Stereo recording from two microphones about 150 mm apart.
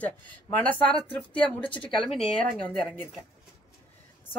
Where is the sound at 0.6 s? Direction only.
10° left (ahead or behind).